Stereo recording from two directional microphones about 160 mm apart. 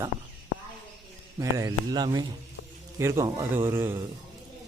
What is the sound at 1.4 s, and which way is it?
A man's voice, 25° right (ahead or behind).